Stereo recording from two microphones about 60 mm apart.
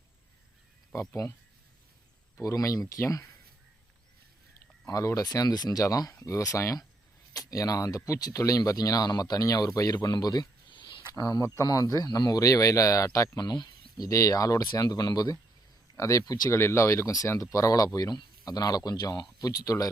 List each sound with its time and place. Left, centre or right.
0.9 s speech: left
2.4 s speech: left
4.9 s speech: left
7.3 s speech: left
11.3 s speech: left
16.0 s speech: left
16.5 s speech: left